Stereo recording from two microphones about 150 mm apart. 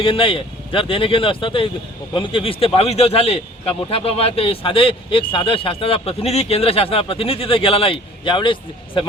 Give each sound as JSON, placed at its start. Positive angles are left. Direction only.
{"t": 0.0, "sound": "a man's voice", "side_deg": 35}